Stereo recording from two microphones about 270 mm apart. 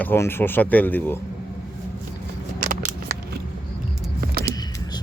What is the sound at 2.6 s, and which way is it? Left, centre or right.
Scissors, right.